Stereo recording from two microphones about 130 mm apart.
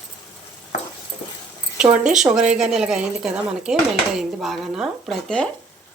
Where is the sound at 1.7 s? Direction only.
5° right (ahead or behind).